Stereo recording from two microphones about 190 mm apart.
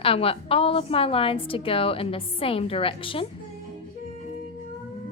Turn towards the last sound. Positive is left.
turn(degrees=30)  # may be behind; listen again after turning